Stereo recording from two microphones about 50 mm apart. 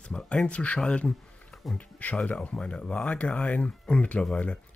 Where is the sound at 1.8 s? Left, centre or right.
Left.